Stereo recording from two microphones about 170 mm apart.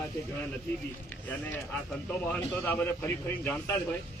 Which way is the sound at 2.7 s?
10° left (ahead or behind).